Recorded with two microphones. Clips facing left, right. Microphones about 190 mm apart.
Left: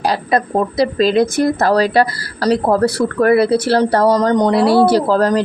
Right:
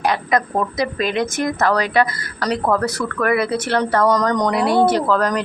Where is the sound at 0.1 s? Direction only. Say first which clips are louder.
Left 3 dB; 30° left (ahead or behind).